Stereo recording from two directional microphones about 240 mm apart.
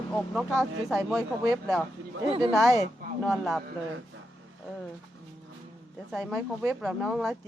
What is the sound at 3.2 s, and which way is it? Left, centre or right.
Speech, centre.